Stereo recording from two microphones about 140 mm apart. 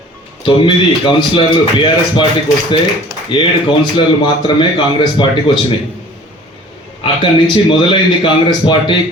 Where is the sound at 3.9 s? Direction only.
35° left (ahead or behind).